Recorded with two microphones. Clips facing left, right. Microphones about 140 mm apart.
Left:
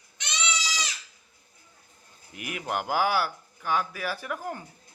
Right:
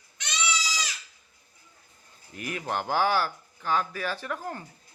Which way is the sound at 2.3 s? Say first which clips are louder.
Even; 10° left (ahead or behind).